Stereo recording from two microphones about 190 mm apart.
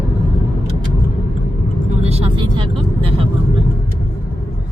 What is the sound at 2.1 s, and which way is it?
Vehicle, 30° right (ahead or behind).